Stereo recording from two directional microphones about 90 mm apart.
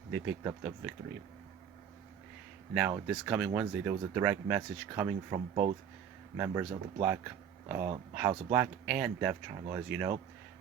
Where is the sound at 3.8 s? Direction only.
25° right (ahead or behind).